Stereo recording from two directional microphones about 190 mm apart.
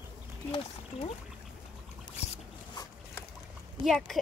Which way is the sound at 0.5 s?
30° left (ahead or behind).